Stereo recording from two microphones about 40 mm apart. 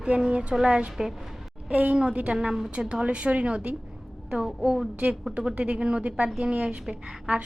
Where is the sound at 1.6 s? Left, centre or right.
Right.